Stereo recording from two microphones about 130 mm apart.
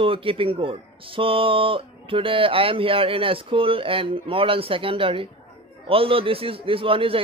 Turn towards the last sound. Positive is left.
turn(degrees=-45)  # may be behind; listen again after turning